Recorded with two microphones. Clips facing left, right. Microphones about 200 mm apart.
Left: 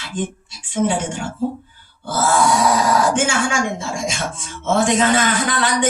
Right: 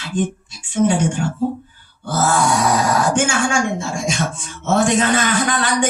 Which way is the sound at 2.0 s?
50° right (ahead or behind).